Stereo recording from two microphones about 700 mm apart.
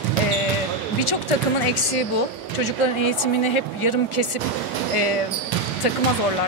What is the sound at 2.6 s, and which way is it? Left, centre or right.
Speech, left.